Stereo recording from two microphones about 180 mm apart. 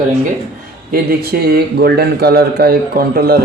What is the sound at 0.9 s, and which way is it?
A man's voice, 60° right (ahead or behind).